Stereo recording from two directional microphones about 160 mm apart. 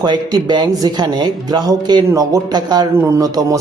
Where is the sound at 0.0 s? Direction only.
25° right (ahead or behind).